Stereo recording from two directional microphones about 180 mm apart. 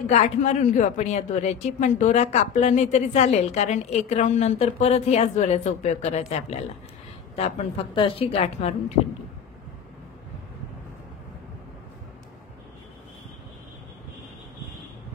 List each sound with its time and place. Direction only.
0.1 s speech: 40° left (ahead or behind)